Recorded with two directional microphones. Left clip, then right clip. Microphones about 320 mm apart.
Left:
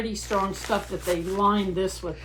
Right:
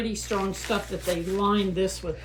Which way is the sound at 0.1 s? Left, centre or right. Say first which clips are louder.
Left 2 dB; centre.